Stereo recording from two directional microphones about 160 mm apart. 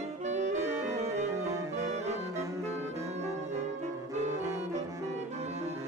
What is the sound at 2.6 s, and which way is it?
Brass instrument, 40° right (ahead or behind).